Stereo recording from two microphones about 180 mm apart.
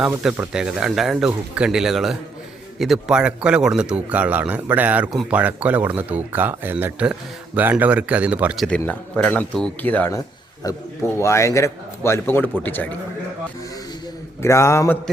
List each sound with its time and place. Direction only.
0.0 s a man's voice: 5° right (ahead or behind)
8.6 s a man's voice: 10° left (ahead or behind)
14.4 s a man's voice: 15° left (ahead or behind)